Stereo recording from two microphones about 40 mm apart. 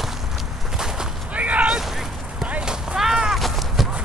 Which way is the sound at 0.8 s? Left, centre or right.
Centre.